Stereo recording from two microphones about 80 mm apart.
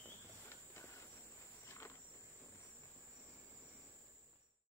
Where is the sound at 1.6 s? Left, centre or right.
Left.